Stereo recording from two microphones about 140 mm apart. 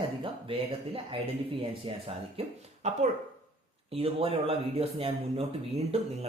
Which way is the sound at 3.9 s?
40° right (ahead or behind).